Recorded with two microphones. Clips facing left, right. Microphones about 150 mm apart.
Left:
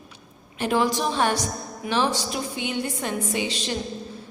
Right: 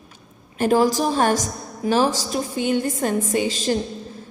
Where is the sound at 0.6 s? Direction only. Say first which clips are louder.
Right 5 dB; 40° right (ahead or behind).